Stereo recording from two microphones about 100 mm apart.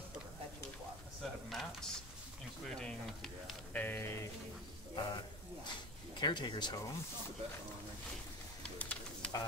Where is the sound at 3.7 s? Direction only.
20° left (ahead or behind).